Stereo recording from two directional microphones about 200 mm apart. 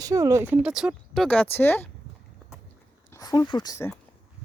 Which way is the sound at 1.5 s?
10° left (ahead or behind).